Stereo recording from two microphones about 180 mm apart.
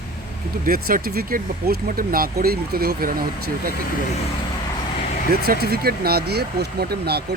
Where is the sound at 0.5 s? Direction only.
55° right (ahead or behind).